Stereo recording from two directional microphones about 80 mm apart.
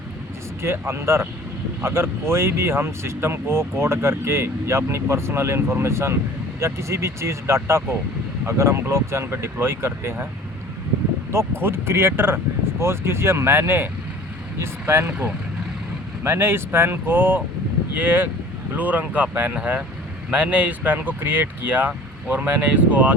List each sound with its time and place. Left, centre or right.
0.6 s speech: right
11.3 s speech: right